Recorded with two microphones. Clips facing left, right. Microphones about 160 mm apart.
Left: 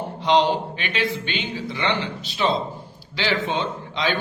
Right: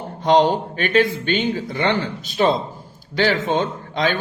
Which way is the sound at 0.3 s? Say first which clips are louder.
Right 3 dB; 45° right (ahead or behind).